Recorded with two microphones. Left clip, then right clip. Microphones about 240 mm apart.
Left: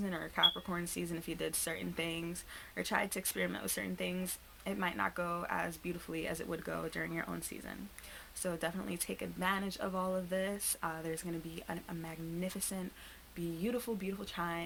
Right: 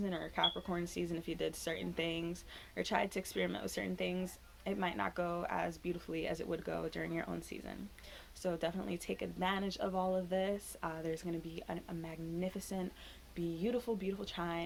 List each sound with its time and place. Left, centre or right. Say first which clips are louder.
0.0 s speech: left 4 dB; left